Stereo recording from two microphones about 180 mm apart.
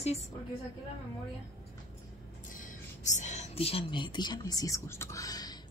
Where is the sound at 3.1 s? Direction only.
40° left (ahead or behind).